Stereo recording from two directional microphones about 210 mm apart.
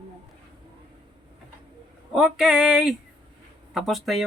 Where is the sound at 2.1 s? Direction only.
5° right (ahead or behind).